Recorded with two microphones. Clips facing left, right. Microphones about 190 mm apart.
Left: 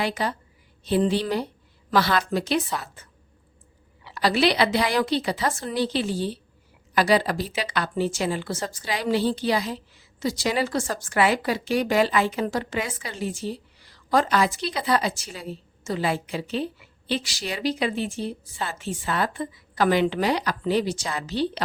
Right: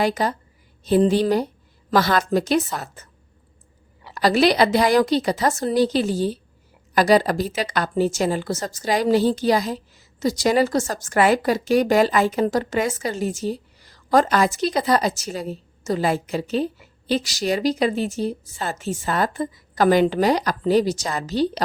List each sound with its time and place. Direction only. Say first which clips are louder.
0.0 s speech: right 5 dB; 45° right (ahead or behind)